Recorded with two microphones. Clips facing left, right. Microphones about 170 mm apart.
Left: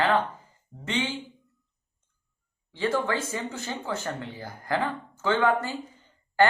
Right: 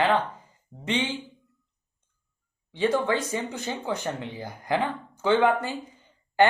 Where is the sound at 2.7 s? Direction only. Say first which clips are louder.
Right 3 dB; 20° right (ahead or behind).